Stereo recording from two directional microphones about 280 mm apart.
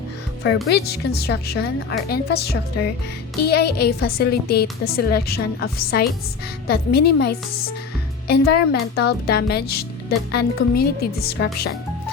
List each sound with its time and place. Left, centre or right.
0.4 s speech: left